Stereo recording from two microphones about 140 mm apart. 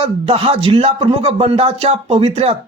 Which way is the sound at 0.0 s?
45° right (ahead or behind).